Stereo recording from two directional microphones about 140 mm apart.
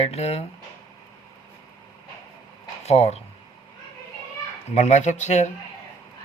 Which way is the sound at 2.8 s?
50° left (ahead or behind).